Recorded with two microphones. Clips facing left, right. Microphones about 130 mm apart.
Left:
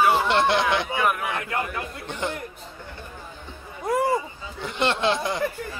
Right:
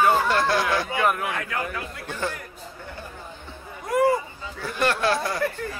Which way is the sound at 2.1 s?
20° left (ahead or behind).